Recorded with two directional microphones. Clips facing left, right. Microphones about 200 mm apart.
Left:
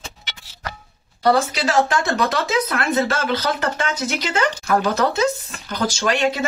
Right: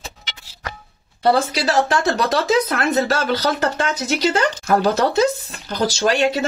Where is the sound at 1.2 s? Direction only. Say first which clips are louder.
Right 1 dB; 35° right (ahead or behind).